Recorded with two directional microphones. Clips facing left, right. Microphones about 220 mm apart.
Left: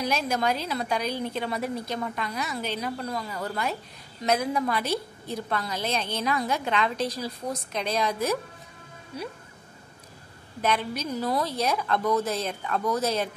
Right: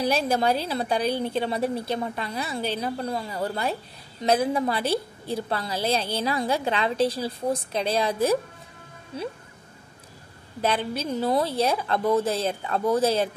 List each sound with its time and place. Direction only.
0.0 s a woman's voice: 35° right (ahead or behind)
10.6 s a woman's voice: 30° right (ahead or behind)